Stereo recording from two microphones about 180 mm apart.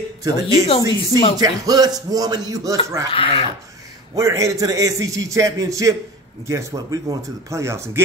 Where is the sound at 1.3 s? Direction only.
20° right (ahead or behind).